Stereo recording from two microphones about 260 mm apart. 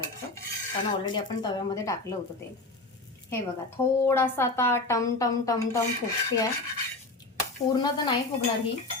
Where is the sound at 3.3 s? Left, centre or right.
Centre.